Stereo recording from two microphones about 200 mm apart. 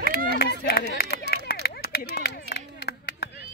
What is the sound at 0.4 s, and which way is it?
Chop, 50° left (ahead or behind).